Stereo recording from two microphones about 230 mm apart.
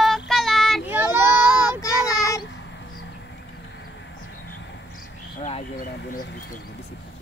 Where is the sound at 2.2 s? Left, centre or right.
Centre.